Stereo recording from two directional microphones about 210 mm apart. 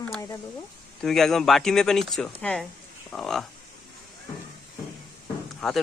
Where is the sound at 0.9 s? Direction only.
Centre (ahead or behind).